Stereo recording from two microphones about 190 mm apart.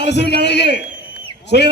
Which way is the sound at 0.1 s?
65° left (ahead or behind).